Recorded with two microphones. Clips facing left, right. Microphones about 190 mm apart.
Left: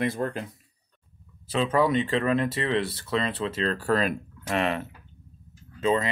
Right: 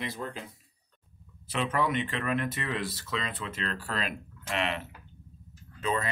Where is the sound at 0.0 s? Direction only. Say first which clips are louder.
Left 9 dB; 50° left (ahead or behind).